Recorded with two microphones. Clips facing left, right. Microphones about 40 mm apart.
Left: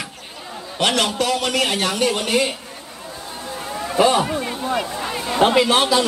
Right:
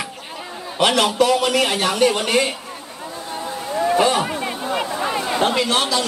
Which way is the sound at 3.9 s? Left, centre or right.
Centre.